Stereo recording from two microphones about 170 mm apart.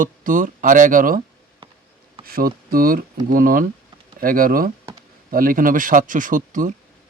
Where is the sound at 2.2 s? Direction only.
60° right (ahead or behind).